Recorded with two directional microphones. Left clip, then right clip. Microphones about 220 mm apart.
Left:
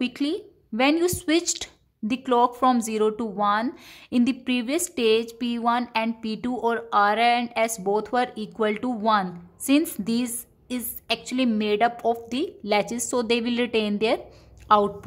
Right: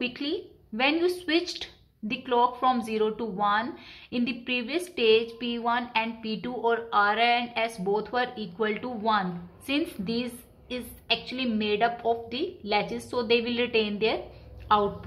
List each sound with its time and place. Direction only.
0.0 s speech: 50° left (ahead or behind)